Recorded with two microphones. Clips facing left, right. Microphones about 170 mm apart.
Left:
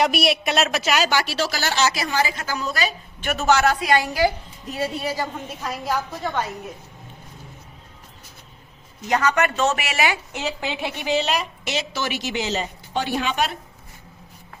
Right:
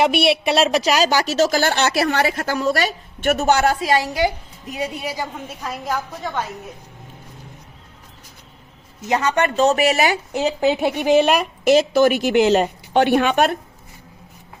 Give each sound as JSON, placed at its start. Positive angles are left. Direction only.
{"t": 0.1, "sound": "speech", "side_deg": -30}
{"t": 3.2, "sound": "a man's voice", "side_deg": -35}
{"t": 3.9, "sound": "a woman's voice", "side_deg": -20}
{"t": 9.0, "sound": "speech", "side_deg": -25}